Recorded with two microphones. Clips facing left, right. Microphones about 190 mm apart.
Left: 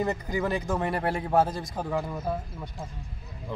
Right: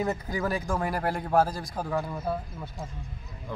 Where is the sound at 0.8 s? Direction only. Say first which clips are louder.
Left 1 dB; centre (ahead or behind).